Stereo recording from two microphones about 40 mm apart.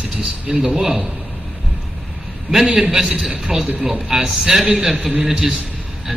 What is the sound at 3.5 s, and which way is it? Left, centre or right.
Speech, right.